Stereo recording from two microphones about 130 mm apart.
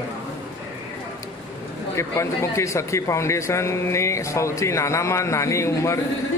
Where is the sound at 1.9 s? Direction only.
20° left (ahead or behind).